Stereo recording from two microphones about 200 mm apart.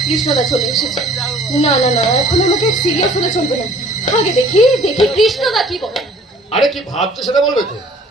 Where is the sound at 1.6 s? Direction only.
35° left (ahead or behind).